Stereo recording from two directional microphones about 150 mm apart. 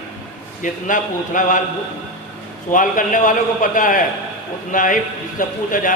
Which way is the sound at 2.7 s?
60° left (ahead or behind).